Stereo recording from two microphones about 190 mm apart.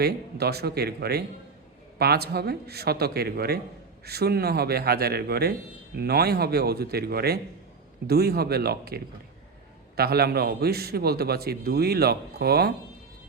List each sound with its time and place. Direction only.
0.0 s a man's voice: 55° right (ahead or behind)